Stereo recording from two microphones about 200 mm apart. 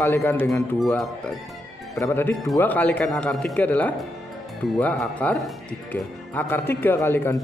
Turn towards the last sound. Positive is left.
turn(degrees=10)  # may be behind; listen again after turning